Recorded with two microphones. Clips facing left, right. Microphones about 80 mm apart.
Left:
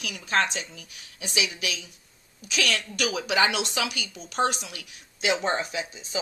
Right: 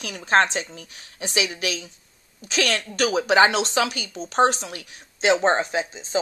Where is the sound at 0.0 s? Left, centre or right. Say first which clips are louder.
Right 6 dB; right.